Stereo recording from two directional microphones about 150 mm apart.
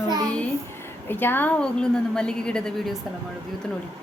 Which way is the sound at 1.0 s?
15° left (ahead or behind).